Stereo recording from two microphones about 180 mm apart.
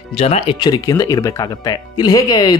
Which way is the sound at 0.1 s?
35° left (ahead or behind).